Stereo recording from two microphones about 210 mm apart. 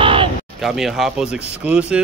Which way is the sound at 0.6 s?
Centre (ahead or behind).